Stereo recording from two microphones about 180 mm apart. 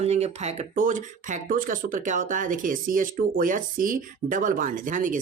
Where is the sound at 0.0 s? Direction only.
35° right (ahead or behind).